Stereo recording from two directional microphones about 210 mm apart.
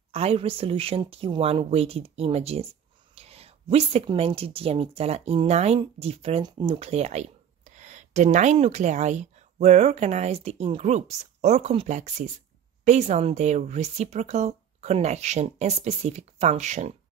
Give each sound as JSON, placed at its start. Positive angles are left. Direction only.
{"t": 0.1, "sound": "speech", "side_deg": -30}